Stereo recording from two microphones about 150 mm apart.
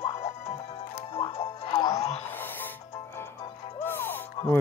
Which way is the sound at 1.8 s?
25° left (ahead or behind).